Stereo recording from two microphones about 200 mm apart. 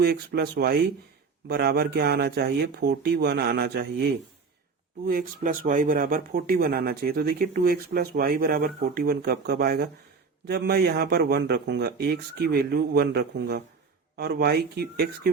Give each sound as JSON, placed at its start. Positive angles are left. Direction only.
{"t": 0.0, "sound": "speech", "side_deg": -55}
{"t": 5.0, "sound": "speech", "side_deg": -45}